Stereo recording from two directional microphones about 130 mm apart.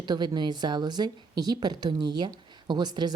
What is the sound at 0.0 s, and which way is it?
A woman's voice, 35° right (ahead or behind).